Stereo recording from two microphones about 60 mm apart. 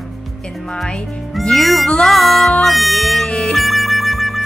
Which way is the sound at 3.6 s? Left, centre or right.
Centre.